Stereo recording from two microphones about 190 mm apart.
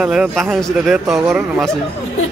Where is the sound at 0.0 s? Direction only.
Centre (ahead or behind).